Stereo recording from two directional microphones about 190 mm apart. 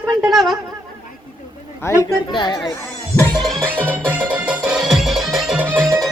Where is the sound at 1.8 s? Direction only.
15° left (ahead or behind).